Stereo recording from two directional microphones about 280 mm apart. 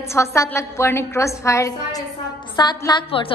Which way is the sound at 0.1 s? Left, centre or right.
Centre.